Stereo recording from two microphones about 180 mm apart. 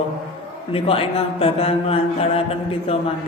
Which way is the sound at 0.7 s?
30° left (ahead or behind).